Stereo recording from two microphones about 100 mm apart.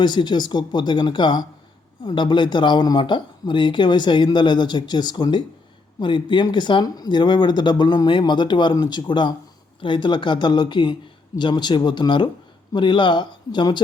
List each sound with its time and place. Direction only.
0.0 s speech: 45° left (ahead or behind)